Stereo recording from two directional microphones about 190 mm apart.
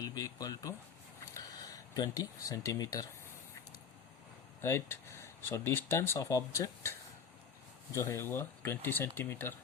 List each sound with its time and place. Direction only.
0.0 s speech: 20° left (ahead or behind)
1.2 s a sound: 20° left (ahead or behind)
4.6 s speech: 15° left (ahead or behind)
7.9 s speech: 15° left (ahead or behind)